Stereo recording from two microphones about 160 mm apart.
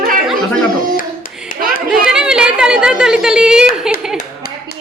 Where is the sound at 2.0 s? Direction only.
5° right (ahead or behind).